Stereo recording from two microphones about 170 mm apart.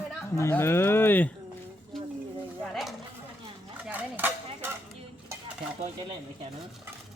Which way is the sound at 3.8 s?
10° right (ahead or behind).